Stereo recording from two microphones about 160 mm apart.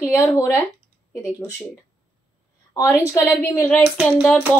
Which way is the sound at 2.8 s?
20° left (ahead or behind).